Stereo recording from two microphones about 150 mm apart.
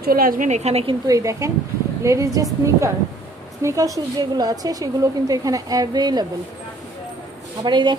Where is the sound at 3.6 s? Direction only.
20° right (ahead or behind).